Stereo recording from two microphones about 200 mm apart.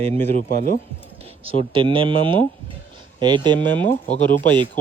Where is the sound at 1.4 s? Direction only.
25° right (ahead or behind).